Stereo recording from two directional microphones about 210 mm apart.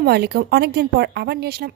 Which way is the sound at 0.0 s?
50° right (ahead or behind).